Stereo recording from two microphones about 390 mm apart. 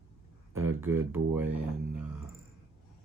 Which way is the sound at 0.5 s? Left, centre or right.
Centre.